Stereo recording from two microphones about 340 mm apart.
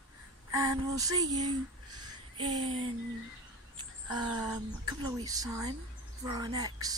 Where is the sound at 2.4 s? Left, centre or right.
Centre.